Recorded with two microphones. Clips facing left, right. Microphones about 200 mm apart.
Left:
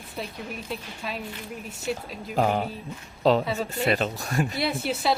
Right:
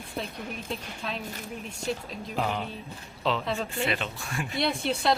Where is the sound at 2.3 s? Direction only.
40° left (ahead or behind).